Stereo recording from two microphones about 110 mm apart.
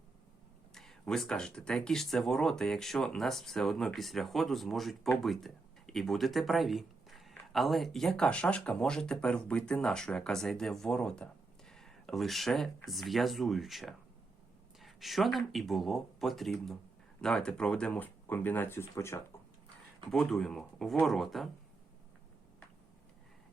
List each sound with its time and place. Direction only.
0.7 s speech: 5° left (ahead or behind); by 19.2 s 25° left (ahead or behind)
20.1 s speech: 5° left (ahead or behind)